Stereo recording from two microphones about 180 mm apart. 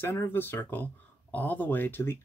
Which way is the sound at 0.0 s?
10° left (ahead or behind).